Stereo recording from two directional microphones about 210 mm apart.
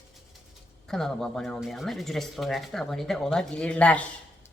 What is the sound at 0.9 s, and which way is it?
Speech, centre (ahead or behind).